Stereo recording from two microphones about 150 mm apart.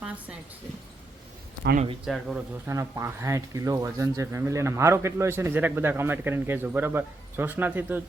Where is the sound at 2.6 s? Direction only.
20° right (ahead or behind).